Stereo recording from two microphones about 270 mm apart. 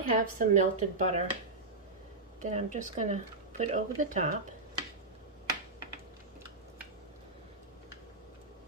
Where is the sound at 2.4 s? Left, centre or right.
Right.